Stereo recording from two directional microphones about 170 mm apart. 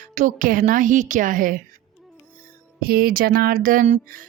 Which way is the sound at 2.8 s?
60° right (ahead or behind).